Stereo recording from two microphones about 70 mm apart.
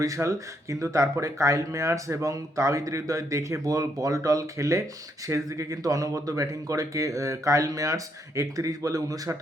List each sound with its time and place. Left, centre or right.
0.0 s speech: right